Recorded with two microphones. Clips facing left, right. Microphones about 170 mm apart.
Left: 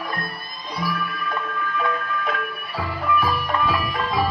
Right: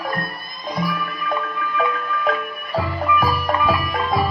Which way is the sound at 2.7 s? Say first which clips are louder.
Right 3 dB; 45° right (ahead or behind).